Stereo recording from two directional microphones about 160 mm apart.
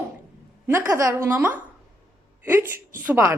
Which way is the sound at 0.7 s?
15° right (ahead or behind).